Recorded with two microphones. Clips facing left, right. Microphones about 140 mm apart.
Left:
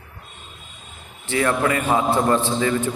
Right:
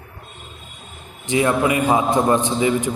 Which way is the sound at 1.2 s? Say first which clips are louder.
Right 2 dB; 15° right (ahead or behind).